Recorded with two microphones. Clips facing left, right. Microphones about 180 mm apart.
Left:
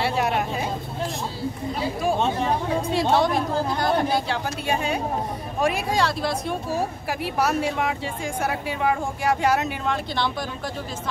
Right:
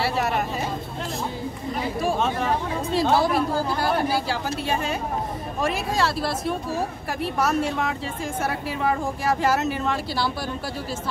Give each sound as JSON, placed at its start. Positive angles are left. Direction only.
{"t": 0.0, "sound": "speech", "side_deg": 0}
{"t": 2.1, "sound": "speech", "side_deg": 30}
{"t": 2.9, "sound": "speech", "side_deg": 0}